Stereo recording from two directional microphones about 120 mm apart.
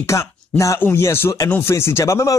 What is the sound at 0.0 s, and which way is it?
Speech, 25° left (ahead or behind).